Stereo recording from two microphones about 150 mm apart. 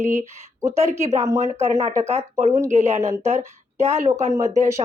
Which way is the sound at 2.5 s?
20° right (ahead or behind).